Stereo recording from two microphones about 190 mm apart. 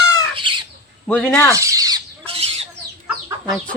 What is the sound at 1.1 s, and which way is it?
Speech, 10° left (ahead or behind).